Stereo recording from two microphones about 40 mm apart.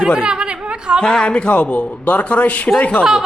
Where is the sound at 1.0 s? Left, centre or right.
Left.